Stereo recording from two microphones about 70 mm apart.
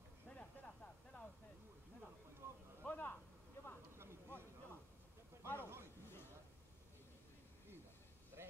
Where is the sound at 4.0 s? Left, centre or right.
Right.